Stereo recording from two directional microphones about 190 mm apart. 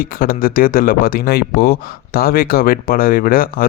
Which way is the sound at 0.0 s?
50° left (ahead or behind).